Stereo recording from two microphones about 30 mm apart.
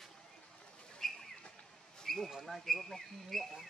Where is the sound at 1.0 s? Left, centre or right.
Centre.